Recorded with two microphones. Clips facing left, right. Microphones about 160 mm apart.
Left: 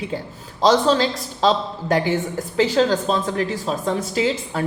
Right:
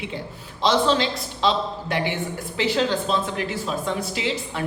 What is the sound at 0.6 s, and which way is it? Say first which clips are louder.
A man's voice: left 4 dB; 40° left (ahead or behind).